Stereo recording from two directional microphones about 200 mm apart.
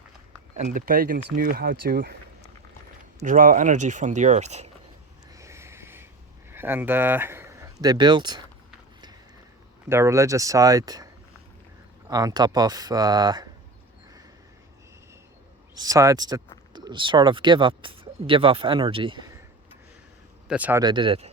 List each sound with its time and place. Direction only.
0.5 s speech: 40° right (ahead or behind)
3.2 s speech: 40° right (ahead or behind)
5.3 s a sound: 15° right (ahead or behind)
6.5 s speech: 10° right (ahead or behind)
9.9 s speech: 15° right (ahead or behind)
15.7 s speech: 15° right (ahead or behind)
20.5 s speech: 10° right (ahead or behind)
20.8 s speech: 25° right (ahead or behind)